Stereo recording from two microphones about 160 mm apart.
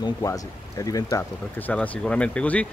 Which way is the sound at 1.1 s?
10° left (ahead or behind).